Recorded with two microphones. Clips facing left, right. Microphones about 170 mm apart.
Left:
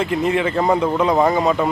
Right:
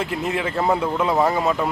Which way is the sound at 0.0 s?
Centre (ahead or behind).